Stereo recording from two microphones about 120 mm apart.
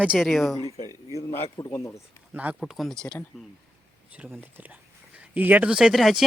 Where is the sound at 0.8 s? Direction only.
30° right (ahead or behind).